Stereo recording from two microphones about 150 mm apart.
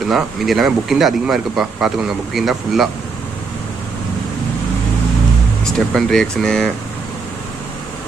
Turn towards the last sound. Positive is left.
turn(degrees=5)  # may be behind; listen again after turning